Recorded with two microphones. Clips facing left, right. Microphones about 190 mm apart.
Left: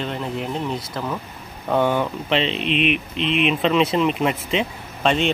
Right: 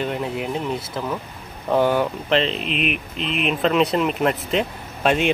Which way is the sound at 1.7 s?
5° right (ahead or behind).